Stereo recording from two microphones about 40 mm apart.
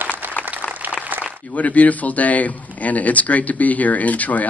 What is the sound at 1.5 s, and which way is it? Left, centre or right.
Speech, left.